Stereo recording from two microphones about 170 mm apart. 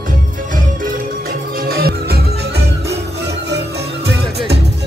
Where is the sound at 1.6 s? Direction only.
60° right (ahead or behind); by 4.2 s 80° right.